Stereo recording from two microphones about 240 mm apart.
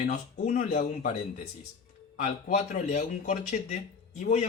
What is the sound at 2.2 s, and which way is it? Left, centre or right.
Speech, left.